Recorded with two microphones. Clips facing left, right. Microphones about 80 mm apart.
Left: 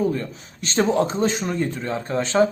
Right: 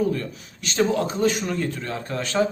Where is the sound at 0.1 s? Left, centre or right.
Left.